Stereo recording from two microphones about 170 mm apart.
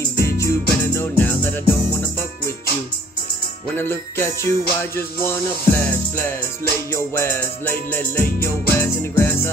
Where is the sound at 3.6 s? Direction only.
10° left (ahead or behind).